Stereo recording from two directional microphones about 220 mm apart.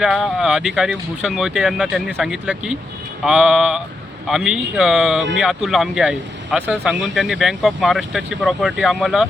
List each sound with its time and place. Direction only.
0.0 s speech: centre (ahead or behind)